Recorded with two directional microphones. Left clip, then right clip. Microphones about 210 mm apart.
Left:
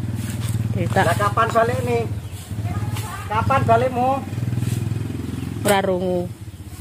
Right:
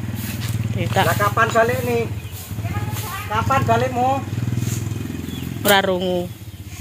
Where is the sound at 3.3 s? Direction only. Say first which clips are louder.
Left 1 dB; 40° right (ahead or behind).